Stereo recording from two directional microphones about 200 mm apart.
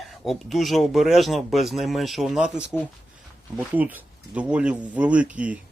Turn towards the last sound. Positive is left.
turn(degrees=-5)  # may be behind; listen again after turning